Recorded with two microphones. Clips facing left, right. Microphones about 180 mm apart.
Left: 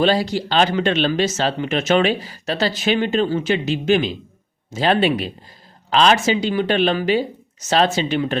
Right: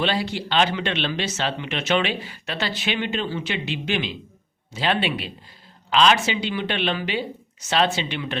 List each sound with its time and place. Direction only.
0.0 s a woman's voice: 40° left (ahead or behind)